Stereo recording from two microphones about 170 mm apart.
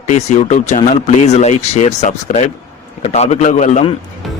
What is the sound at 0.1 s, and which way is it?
Speech, 45° left (ahead or behind).